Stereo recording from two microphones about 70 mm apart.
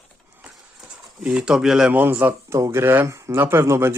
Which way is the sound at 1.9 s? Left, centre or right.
Right.